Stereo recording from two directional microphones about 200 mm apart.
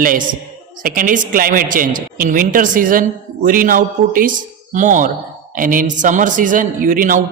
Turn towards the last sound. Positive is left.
turn(degrees=-40)  # may be behind; listen again after turning